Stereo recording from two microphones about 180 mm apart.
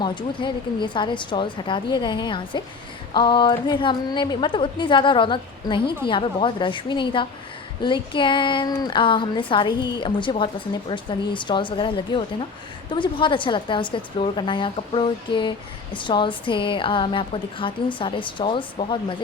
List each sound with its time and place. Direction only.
0.0 s a woman's voice: 25° left (ahead or behind)